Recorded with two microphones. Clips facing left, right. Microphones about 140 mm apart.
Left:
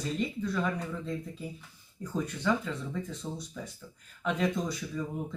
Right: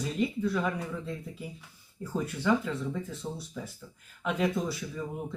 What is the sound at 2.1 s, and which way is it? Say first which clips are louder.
Speech: right 2 dB; 5° right (ahead or behind).